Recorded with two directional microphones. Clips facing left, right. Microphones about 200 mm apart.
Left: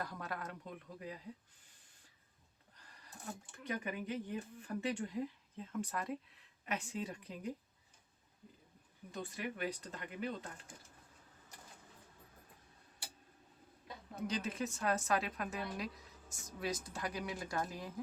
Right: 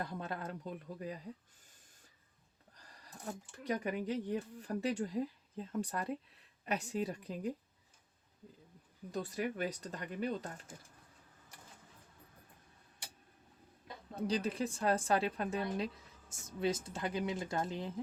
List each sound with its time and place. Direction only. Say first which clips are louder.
0.0 s speech: right 3 dB; 25° right (ahead or behind)
3.5 s speech: right 5 dB; 35° right (ahead or behind)
9.1 s speech: right 5 dB; 40° right (ahead or behind)
14.2 s speech: right 4 dB; 35° right (ahead or behind)